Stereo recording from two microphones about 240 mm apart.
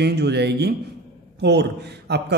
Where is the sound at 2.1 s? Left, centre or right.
Right.